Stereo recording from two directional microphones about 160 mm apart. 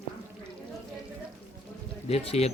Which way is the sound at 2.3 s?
40° left (ahead or behind).